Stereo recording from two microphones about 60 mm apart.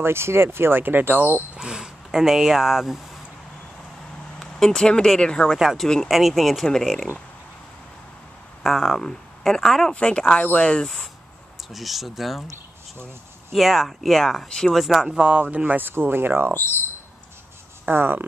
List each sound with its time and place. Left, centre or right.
0.0 s speech: right
1.6 s speech: centre
4.4 s speech: centre
5.6 s speech: centre
8.6 s speech: centre
9.9 s speech: centre
11.7 s speech: centre
13.5 s speech: centre
14.8 s speech: centre
15.5 s speech: right
17.8 s speech: right